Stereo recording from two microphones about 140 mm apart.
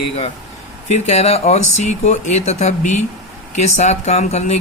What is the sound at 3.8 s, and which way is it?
Speech, 55° left (ahead or behind).